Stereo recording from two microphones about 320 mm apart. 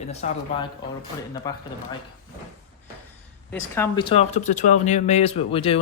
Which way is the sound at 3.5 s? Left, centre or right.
Centre.